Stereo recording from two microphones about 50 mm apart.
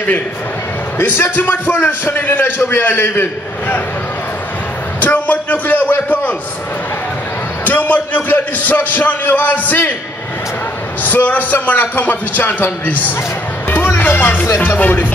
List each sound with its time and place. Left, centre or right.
0.9 s a man's voice: left
5.0 s a sound: left
7.6 s a man's voice: left
11.1 s a man's voice: left